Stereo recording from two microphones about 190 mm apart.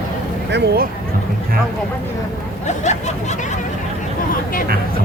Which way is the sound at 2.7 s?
35° left (ahead or behind).